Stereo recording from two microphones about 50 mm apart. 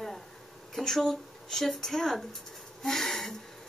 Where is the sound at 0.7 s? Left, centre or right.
Centre.